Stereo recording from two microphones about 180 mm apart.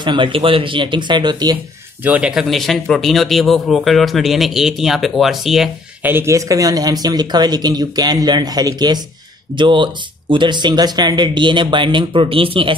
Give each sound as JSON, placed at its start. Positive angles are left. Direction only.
{"t": 0.0, "sound": "speech", "side_deg": -25}
{"t": 2.0, "sound": "speech", "side_deg": -5}
{"t": 6.1, "sound": "speech", "side_deg": -15}